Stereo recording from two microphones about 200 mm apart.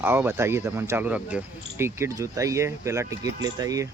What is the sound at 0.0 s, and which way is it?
Speech, 10° right (ahead or behind).